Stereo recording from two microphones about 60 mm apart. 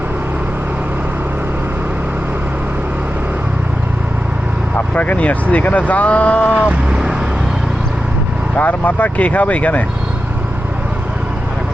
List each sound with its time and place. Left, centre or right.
4.9 s speech: left
6.5 s vehicle: centre
8.5 s speech: left